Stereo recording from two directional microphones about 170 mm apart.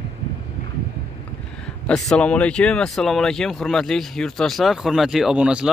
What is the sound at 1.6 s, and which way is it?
Speech, 5° left (ahead or behind).